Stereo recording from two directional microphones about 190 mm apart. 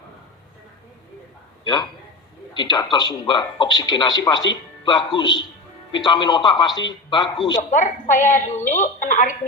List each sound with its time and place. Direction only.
1.6 s a man's voice: 25° left (ahead or behind)
7.7 s a woman's voice: 40° left (ahead or behind)